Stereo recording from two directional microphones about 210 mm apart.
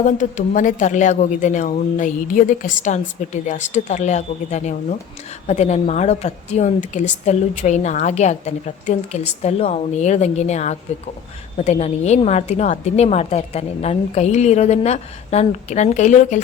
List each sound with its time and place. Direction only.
0.0 s a woman's voice: 35° left (ahead or behind)